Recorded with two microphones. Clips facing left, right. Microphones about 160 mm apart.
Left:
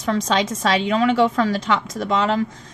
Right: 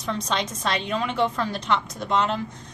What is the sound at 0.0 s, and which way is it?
A woman's voice, 90° left.